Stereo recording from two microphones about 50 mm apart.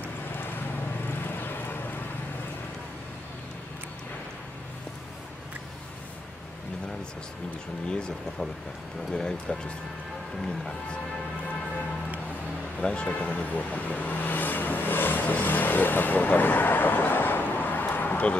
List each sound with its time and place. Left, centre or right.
1.2 s vehicle: left
7.9 s speech: centre
12.8 s speech: left
13.1 s speech: left